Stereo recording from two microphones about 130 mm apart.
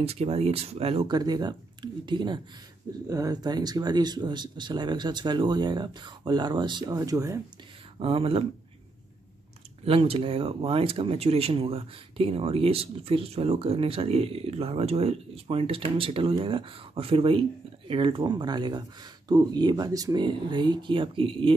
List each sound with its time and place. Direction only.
0.0 s speech: 50° right (ahead or behind)
1.0 s speech: 30° right (ahead or behind)
8.0 s speech: 45° right (ahead or behind)
9.8 s speech: 45° right (ahead or behind)